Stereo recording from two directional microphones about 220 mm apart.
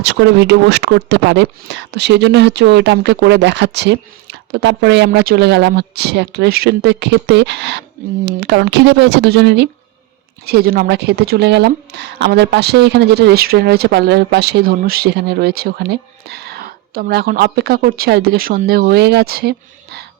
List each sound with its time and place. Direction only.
0.0 s speech: 50° right (ahead or behind)